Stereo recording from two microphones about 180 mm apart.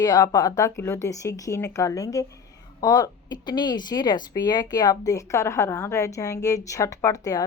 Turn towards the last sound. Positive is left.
turn(degrees=20)  # may be behind; listen again after turning